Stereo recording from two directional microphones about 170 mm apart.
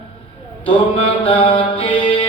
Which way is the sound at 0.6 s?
35° left (ahead or behind).